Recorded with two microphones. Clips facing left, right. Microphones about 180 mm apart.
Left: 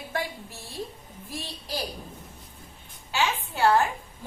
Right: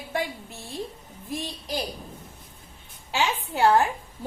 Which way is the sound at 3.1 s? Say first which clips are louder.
Right 1 dB; 15° right (ahead or behind).